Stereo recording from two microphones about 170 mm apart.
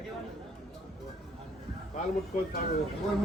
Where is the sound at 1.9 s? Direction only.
50° left (ahead or behind).